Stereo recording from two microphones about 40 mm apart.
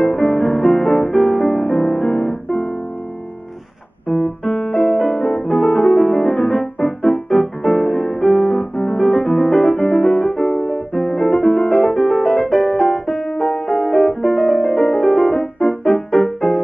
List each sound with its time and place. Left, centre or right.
0.0 s music: centre
4.1 s piano: centre
13.5 s music: centre
13.8 s music: centre